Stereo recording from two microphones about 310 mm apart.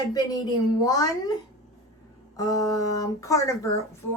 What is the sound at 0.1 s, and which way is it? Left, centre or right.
Speech, centre.